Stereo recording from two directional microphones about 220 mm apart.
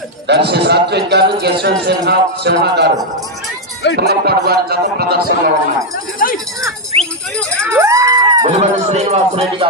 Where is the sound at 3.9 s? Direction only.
45° right (ahead or behind).